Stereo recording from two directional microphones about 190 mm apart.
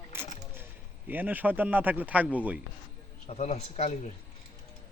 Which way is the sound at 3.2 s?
35° left (ahead or behind).